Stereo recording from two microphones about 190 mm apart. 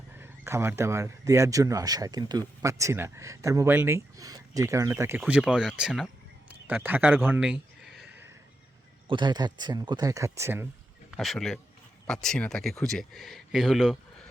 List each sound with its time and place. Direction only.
0.2 s speech: 15° right (ahead or behind)
6.5 s a sound: 10° right (ahead or behind)
9.0 s speech: 25° right (ahead or behind)
11.2 s speech: centre (ahead or behind)